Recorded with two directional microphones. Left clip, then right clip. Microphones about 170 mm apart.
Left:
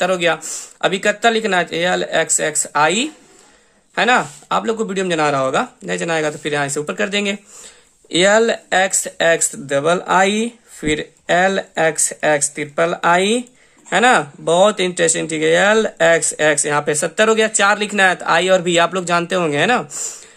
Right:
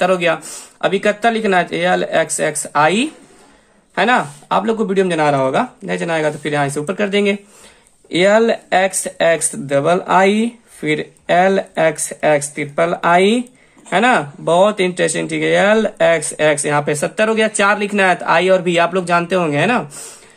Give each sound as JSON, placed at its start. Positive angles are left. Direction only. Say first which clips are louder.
{"t": 0.0, "sound": "speech", "louder": "right 2 dB", "side_deg": 15}